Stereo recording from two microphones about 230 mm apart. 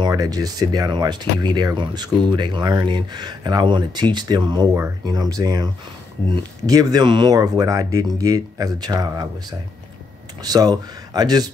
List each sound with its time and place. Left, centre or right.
0.0 s speech: centre